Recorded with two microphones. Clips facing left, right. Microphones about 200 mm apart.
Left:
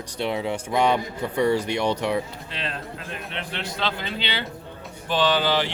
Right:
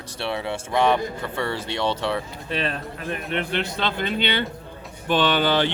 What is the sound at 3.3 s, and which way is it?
A man's voice, 60° right (ahead or behind).